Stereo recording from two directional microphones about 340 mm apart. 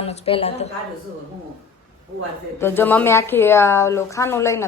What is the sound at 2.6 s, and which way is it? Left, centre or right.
Speech, centre.